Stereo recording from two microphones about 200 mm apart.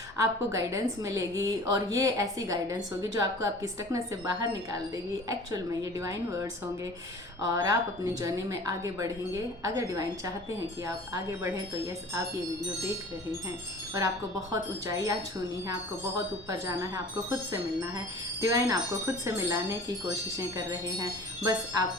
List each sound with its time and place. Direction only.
0.2 s a woman's voice: 15° right (ahead or behind)
14.5 s a woman's voice: 15° right (ahead or behind)
16.1 s a woman's voice: 15° right (ahead or behind)